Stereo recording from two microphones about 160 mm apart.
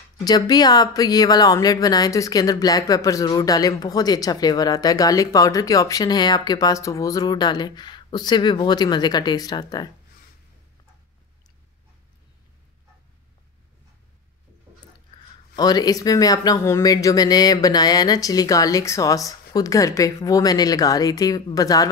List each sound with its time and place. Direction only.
0.2 s speech: 25° left (ahead or behind)
15.5 s speech: 25° left (ahead or behind)